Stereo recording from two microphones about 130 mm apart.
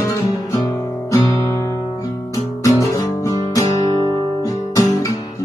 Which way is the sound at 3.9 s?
30° left (ahead or behind).